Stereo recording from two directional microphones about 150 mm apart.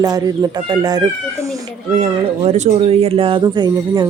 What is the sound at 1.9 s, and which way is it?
Speech, 40° right (ahead or behind).